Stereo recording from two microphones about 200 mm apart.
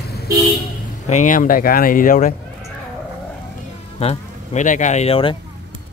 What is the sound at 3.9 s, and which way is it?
Speech, 35° left (ahead or behind).